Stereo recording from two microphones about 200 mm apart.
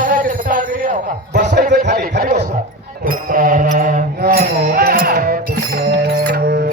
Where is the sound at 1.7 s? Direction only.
60° right (ahead or behind).